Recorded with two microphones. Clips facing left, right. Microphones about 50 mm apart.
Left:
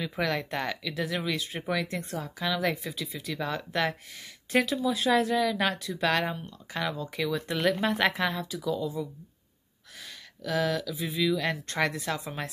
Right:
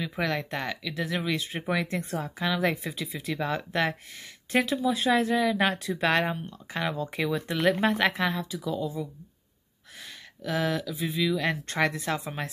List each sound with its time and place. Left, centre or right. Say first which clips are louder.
0.0 s speech: even; centre
2.1 s speech: right 1 dB; right
5.8 s speech: right 2 dB; right
7.4 s a woman's voice: right 3 dB; centre
10.4 s speech: even; centre